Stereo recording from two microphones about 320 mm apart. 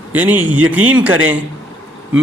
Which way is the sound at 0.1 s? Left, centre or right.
Centre.